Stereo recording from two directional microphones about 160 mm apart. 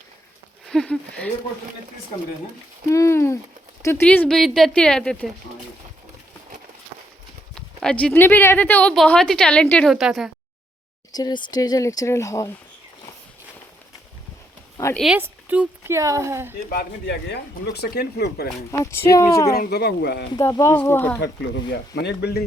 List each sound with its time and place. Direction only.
0.6 s a sound: 5° left (ahead or behind)
2.9 s speech: 15° left (ahead or behind)
7.5 s speech: 5° left (ahead or behind)
11.1 s speech: 25° left (ahead or behind)
14.9 s speech: centre (ahead or behind)
16.6 s speech: 85° left
18.7 s speech: 15° left (ahead or behind)
19.5 s speech: 80° left
20.3 s speech: 20° left (ahead or behind)
21.7 s speech: 90° left